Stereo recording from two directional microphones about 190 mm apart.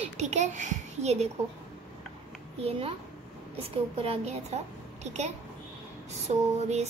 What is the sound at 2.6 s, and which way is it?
A child's voice, 30° right (ahead or behind).